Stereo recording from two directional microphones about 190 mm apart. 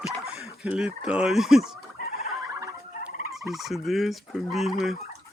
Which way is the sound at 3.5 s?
Centre (ahead or behind).